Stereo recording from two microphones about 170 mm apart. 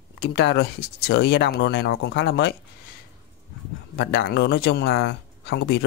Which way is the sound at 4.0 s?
85° left.